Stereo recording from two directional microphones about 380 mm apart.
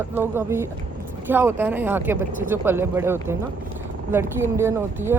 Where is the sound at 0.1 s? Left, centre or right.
Centre.